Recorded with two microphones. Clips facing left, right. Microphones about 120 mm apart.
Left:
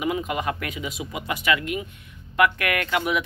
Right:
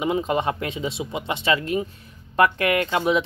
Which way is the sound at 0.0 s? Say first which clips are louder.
Right 3 dB; 30° right (ahead or behind).